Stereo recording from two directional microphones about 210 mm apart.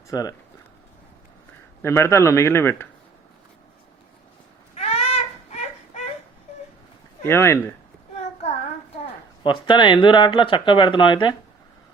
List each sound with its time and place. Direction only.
0.1 s a man's voice: 15° left (ahead or behind)
1.8 s a man's voice: 10° left (ahead or behind)
4.7 s baby cry: 30° left (ahead or behind)
7.3 s a man's voice: 10° left (ahead or behind)
9.4 s speech: 20° left (ahead or behind)